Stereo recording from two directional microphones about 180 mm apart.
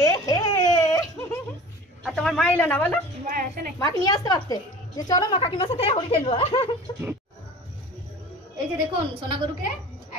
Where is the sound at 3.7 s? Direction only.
20° left (ahead or behind).